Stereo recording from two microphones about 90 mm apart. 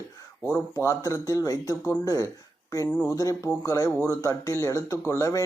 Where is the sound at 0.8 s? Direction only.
30° left (ahead or behind).